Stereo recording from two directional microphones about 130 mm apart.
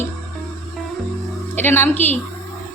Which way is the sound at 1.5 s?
15° left (ahead or behind).